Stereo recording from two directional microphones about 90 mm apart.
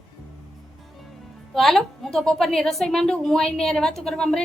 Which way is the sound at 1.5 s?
Centre (ahead or behind).